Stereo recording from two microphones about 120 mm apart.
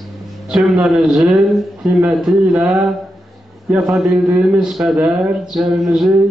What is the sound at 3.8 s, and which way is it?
Speech, 5° right (ahead or behind).